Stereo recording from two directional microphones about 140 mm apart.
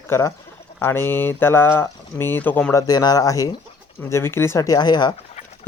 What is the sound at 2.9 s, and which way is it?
Speech, 30° left (ahead or behind).